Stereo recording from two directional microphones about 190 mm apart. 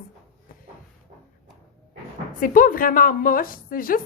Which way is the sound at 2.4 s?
45° left (ahead or behind).